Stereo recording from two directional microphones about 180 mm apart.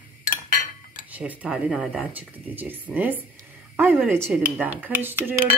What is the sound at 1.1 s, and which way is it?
Speech, 10° right (ahead or behind).